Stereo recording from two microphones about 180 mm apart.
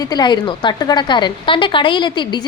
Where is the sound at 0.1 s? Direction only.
25° left (ahead or behind).